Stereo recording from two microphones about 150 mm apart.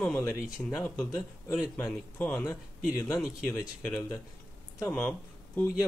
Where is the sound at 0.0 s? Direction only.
15° left (ahead or behind).